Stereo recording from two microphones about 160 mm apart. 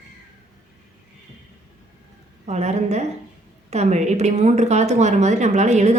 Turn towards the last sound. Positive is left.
turn(degrees=-45)  # may be behind; listen again after turning